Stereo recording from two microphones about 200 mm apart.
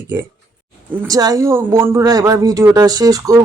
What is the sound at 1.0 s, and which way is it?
Speech, 20° right (ahead or behind).